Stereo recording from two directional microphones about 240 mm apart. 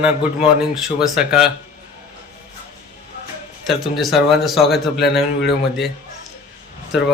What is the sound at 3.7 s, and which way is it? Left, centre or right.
Speech, centre.